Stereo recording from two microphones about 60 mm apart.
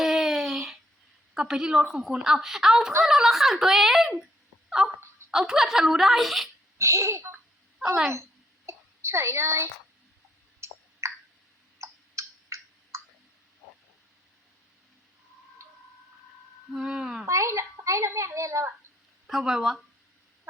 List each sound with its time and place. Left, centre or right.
0.0 s a sound: centre
1.3 s a woman's voice: centre
6.7 s speech: right
8.1 s a sound: right
10.6 s clicking: right
11.0 s a sound: right
16.7 s speech: centre
17.2 s speech: right
19.3 s a woman's voice: centre